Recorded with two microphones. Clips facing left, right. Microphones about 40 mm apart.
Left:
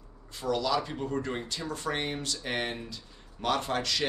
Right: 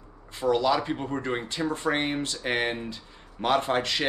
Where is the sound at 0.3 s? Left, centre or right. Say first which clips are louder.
Right 5 dB; right.